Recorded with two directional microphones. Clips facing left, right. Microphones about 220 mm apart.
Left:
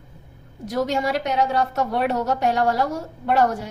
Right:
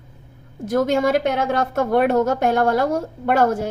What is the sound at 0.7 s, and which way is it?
A woman's voice, 50° right (ahead or behind).